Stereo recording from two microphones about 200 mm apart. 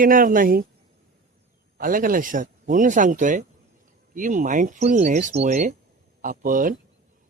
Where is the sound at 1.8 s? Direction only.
45° right (ahead or behind).